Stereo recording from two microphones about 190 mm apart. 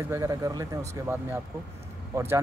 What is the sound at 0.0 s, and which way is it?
Speech, 15° right (ahead or behind).